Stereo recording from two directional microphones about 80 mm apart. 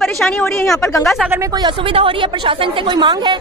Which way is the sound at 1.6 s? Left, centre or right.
Right.